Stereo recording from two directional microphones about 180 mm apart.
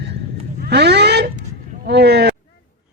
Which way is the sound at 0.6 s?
65° right (ahead or behind).